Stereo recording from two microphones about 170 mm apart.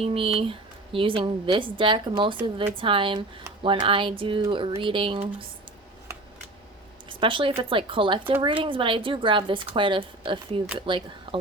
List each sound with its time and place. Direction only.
0.0 s a woman's voice: 35° right (ahead or behind)
7.1 s a woman's voice: 30° right (ahead or behind)